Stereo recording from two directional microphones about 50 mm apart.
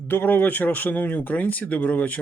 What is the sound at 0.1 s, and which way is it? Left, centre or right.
Speech, left.